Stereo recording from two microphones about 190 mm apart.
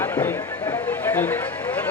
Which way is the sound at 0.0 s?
10° left (ahead or behind).